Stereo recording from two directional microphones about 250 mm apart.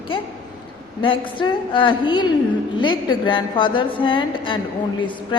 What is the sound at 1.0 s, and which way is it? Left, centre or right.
Speech, centre.